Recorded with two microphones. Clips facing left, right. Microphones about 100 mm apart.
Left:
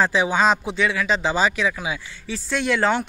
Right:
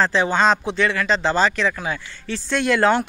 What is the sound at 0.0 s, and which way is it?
Speech, 5° left (ahead or behind).